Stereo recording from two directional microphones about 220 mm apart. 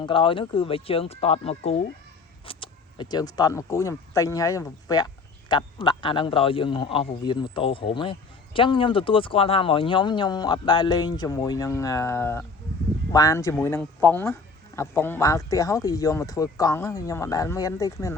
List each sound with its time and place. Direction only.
0.0 s speech: 25° left (ahead or behind)